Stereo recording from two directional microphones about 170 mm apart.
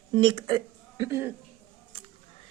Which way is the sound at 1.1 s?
15° right (ahead or behind).